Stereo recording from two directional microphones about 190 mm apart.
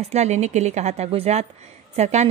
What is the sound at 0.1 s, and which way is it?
A woman's voice, 35° right (ahead or behind).